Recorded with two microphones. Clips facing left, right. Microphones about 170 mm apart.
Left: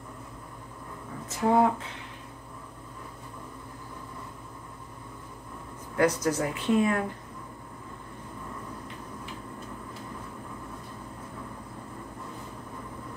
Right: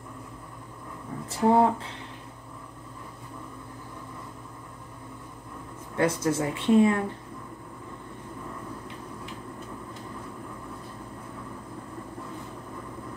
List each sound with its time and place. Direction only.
1.3 s speech: 30° right (ahead or behind)
5.9 s speech: 25° right (ahead or behind)